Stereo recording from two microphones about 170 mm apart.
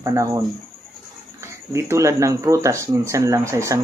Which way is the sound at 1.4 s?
15° right (ahead or behind).